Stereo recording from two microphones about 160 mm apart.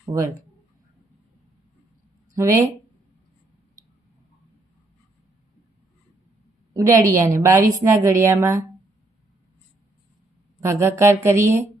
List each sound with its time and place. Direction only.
0.0 s speech: 15° right (ahead or behind)
2.3 s a woman's voice: 20° right (ahead or behind)
6.7 s a woman's voice: 20° right (ahead or behind)
10.6 s a woman's voice: 15° right (ahead or behind)